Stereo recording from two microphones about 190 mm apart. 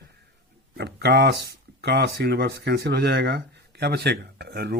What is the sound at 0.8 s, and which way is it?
Speech, 60° right (ahead or behind).